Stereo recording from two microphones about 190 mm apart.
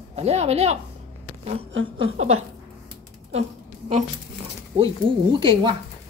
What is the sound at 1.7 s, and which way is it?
Speech, 90° right.